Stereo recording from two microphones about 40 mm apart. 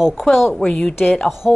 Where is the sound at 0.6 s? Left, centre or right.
Centre.